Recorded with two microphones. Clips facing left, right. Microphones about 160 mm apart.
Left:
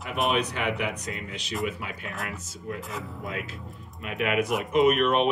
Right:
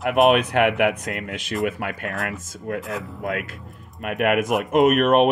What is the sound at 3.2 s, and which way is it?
Speech, 60° right (ahead or behind).